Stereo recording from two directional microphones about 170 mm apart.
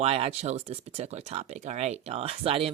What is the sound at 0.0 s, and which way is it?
Speech, 35° right (ahead or behind).